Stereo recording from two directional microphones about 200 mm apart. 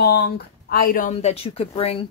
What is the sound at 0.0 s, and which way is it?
Speech, 55° left (ahead or behind).